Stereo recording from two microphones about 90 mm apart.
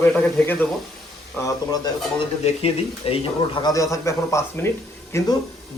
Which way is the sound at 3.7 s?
35° left (ahead or behind).